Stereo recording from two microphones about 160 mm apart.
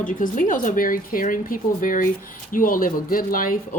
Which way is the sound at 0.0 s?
55° left (ahead or behind).